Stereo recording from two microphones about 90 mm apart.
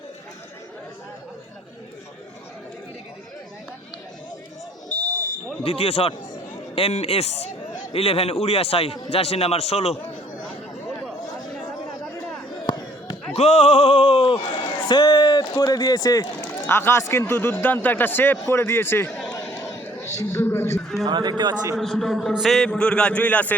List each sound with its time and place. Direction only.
4.9 s buzzer: 20° left (ahead or behind)
5.6 s a man's voice: 90° left
7.9 s a man's voice: 90° left
12.6 s a sound: 70° left (ahead or behind)
14.3 s a man's voice: 50° left (ahead or behind)
16.6 s a man's voice: 25° left (ahead or behind)
21.0 s a man's voice: 55° right (ahead or behind)
21.8 s a man's voice: 5° left (ahead or behind)